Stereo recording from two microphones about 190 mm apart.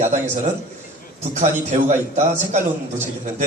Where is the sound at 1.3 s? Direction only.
40° right (ahead or behind).